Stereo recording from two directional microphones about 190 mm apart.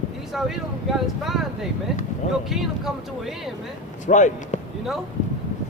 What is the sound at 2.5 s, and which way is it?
Speech, centre (ahead or behind).